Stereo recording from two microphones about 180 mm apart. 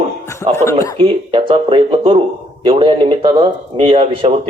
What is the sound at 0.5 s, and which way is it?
Speech, 15° left (ahead or behind).